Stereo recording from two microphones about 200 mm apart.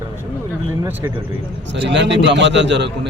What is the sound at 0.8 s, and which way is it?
Speech, 10° right (ahead or behind).